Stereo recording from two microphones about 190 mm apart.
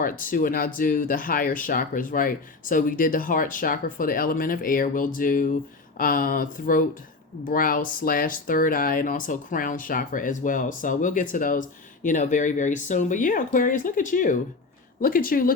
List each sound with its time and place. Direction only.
0.0 s speech: 45° left (ahead or behind)